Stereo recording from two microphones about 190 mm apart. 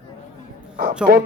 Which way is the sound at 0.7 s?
40° right (ahead or behind).